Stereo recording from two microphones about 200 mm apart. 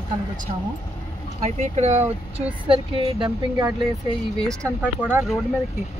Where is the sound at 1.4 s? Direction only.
35° right (ahead or behind).